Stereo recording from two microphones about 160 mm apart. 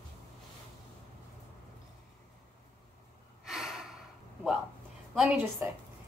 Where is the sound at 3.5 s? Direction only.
5° right (ahead or behind).